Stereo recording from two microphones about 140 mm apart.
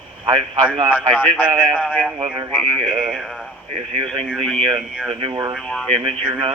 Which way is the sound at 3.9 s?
40° right (ahead or behind).